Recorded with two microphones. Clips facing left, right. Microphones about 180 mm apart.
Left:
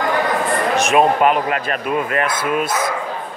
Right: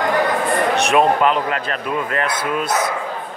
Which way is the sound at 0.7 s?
5° left (ahead or behind).